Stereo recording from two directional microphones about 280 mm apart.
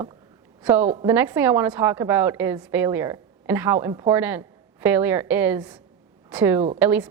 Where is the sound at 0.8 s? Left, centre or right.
Right.